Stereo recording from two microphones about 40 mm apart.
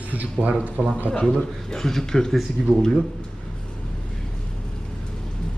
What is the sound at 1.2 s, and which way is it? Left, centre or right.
Speech, centre.